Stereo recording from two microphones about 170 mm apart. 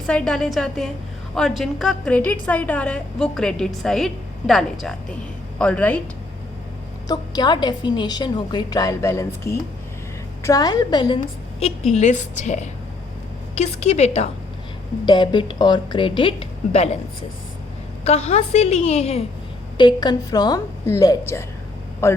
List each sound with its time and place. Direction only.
0.0 s a woman's voice: 5° left (ahead or behind)
7.1 s a woman's voice: 25° left (ahead or behind)
11.2 s a woman's voice: 40° left (ahead or behind)
15.0 s a woman's voice: 25° left (ahead or behind)
18.0 s a woman's voice: 40° left (ahead or behind)
19.7 s a woman's voice: 25° left (ahead or behind)